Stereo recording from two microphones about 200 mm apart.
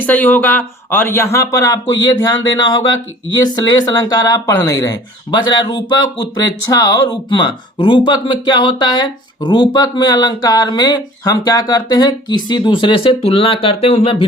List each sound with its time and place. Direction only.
0.0 s speech: 10° left (ahead or behind); by 14.3 s 30° left (ahead or behind)